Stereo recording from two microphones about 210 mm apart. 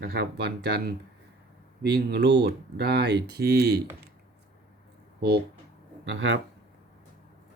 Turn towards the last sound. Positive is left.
turn(degrees=-60)  # may be behind; listen again after turning